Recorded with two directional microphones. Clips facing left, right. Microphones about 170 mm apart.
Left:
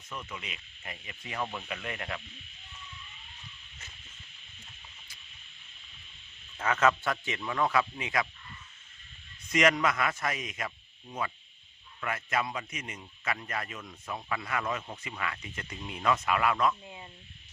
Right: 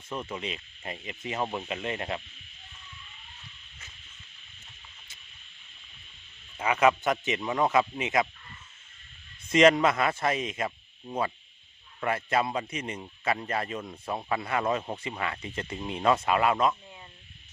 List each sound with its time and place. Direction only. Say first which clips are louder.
0.1 s speech: right 7 dB; 30° right (ahead or behind)
6.6 s speech: right 3 dB; 10° right (ahead or behind)
9.5 s a man's voice: right 6 dB; 25° right (ahead or behind)